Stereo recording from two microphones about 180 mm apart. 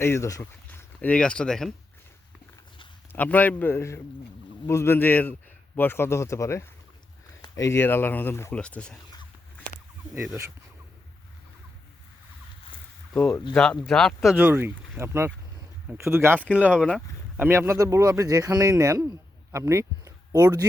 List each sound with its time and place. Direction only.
0.0 s speech: 15° left (ahead or behind)
3.1 s speech: 10° left (ahead or behind)
13.1 s speech: 10° left (ahead or behind); by 20.7 s 20° right (ahead or behind)